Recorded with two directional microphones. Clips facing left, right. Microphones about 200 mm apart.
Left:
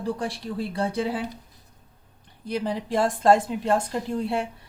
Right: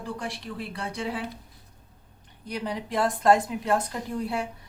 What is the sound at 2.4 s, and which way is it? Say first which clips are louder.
Speech: left 4 dB; 30° left (ahead or behind).